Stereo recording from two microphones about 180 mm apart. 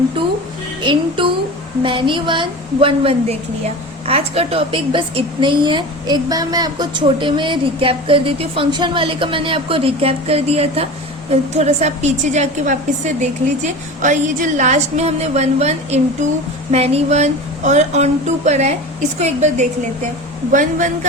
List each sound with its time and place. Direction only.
0.9 s a woman's voice: 30° right (ahead or behind); by 21.1 s 45° right (ahead or behind)